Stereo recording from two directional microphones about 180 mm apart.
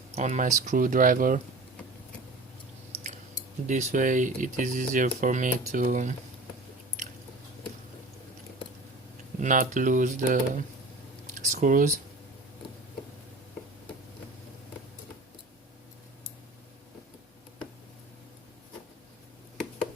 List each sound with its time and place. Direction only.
0.1 s speech: 45° right (ahead or behind)
3.7 s speech: 40° right (ahead or behind)
9.4 s speech: 45° right (ahead or behind)